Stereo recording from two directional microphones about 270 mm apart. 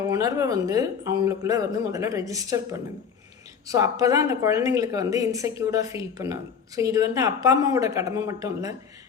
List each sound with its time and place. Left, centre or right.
0.1 s a woman's voice: centre